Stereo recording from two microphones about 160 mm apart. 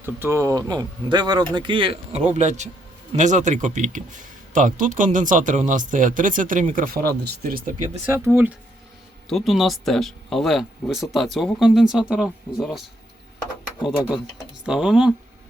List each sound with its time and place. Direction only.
0.0 s speech: 15° right (ahead or behind); by 7.6 s 70° right (ahead or behind)
8.0 s speech: 15° right (ahead or behind)
9.3 s speech: centre (ahead or behind)
14.0 s speech: 5° right (ahead or behind)